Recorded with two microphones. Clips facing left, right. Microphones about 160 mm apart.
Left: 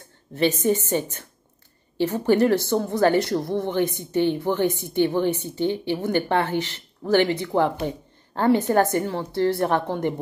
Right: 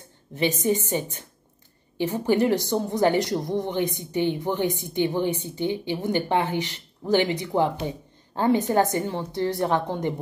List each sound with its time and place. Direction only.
0.3 s a woman's voice: 15° right (ahead or behind)